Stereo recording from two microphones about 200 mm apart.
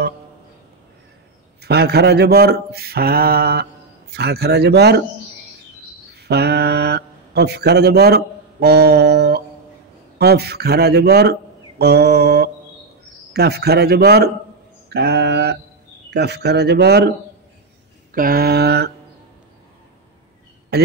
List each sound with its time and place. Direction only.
1.6 s speech: 55° right (ahead or behind)
6.1 s speech: 55° right (ahead or behind)
18.1 s speech: 45° right (ahead or behind)
20.7 s a man's voice: 50° right (ahead or behind)